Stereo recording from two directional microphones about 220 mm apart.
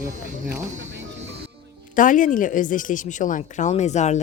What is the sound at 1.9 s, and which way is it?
Speech, 35° left (ahead or behind).